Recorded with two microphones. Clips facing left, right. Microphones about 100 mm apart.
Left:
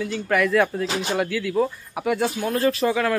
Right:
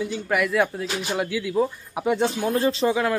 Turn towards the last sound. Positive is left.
turn(degrees=-15)  # may be behind; listen again after turning